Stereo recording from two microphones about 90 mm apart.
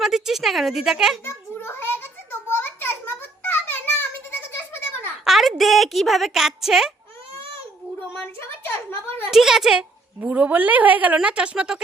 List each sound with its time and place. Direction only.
0.0 s a woman's voice: 5° right (ahead or behind)
1.2 s a sound: 25° left (ahead or behind)
5.2 s a woman's voice: centre (ahead or behind)
8.4 s a sound: 25° left (ahead or behind)
9.3 s a woman's voice: 5° right (ahead or behind)
10.2 s a woman's voice: 20° right (ahead or behind)